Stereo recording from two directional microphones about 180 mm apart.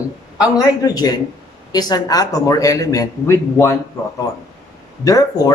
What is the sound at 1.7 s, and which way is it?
Speech, 20° left (ahead or behind).